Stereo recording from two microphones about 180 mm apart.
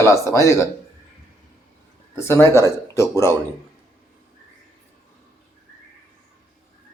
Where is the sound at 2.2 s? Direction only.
15° left (ahead or behind).